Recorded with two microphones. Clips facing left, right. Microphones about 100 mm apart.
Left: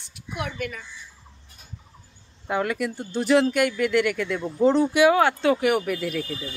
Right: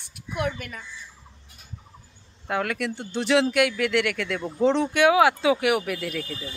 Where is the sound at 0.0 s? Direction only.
50° right (ahead or behind).